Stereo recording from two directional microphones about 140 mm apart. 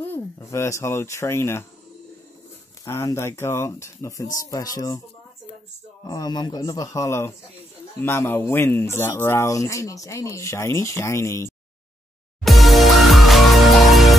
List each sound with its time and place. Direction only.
0.0 s speech: 15° left (ahead or behind)
2.8 s speech: 20° left (ahead or behind)
6.0 s speech: 30° left (ahead or behind)
12.4 s music: centre (ahead or behind)